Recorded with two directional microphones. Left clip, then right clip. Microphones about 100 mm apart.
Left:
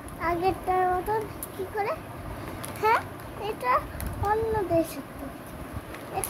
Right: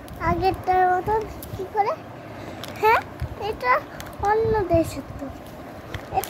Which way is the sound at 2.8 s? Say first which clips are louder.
Right 5 dB; 40° right (ahead or behind).